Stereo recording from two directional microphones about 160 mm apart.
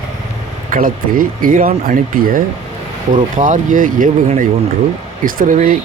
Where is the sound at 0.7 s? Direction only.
60° right (ahead or behind).